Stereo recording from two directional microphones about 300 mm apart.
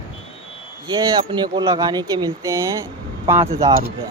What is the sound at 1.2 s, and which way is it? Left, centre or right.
Speech, centre.